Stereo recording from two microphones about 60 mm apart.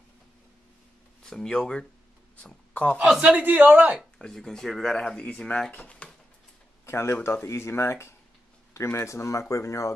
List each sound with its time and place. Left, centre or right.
1.2 s speech: centre
3.2 s a man's voice: right
4.2 s speech: centre; by 6.0 s left
6.9 s speech: left